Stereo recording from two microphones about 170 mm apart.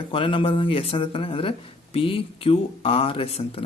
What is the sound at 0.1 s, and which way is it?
Speech, 30° left (ahead or behind).